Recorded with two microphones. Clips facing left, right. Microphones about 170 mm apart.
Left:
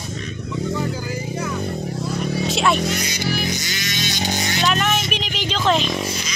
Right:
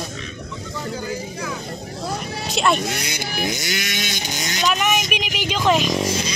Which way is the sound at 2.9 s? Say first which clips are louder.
Left 3 dB; 55° right (ahead or behind).